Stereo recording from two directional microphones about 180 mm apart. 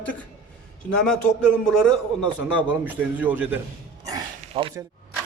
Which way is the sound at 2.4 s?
10° right (ahead or behind).